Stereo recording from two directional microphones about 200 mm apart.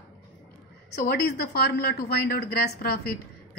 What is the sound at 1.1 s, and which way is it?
Speech, 50° left (ahead or behind).